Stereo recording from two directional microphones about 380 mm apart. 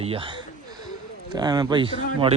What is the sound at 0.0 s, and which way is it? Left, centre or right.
A man's voice, centre.